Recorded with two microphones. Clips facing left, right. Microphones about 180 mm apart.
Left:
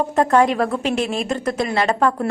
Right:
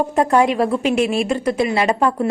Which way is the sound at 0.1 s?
10° right (ahead or behind).